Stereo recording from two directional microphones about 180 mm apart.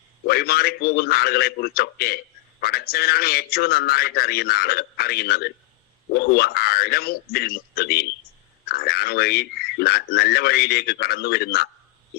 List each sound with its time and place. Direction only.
0.3 s a man's voice: 60° left (ahead or behind)